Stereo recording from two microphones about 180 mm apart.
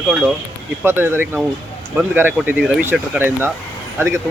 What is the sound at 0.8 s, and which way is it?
Speech, 15° right (ahead or behind).